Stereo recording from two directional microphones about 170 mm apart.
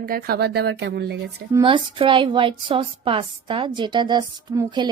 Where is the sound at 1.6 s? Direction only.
30° right (ahead or behind).